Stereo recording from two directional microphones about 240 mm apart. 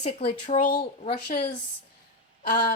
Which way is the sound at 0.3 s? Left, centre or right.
Left.